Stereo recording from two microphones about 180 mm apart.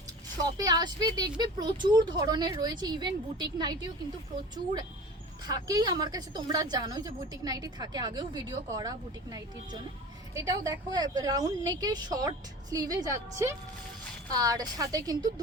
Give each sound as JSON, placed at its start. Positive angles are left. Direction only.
{"t": 0.3, "sound": "a woman's voice", "side_deg": -20}